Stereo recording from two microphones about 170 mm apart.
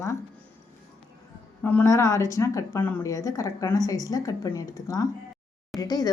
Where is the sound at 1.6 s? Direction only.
15° left (ahead or behind).